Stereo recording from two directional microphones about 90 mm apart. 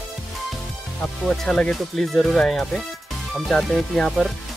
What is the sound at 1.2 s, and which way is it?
Speech, 5° left (ahead or behind).